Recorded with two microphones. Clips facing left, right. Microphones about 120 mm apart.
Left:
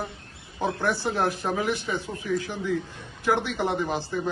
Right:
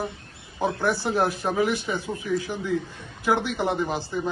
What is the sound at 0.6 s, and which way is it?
A man's voice, 5° right (ahead or behind).